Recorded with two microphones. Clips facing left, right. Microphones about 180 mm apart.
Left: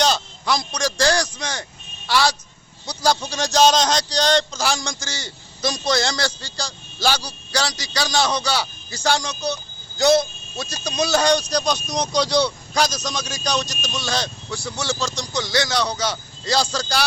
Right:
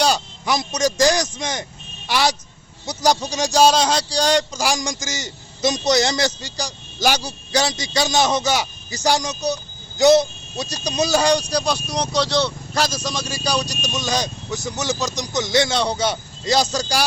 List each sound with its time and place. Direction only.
0.0 s a man's voice: 15° right (ahead or behind)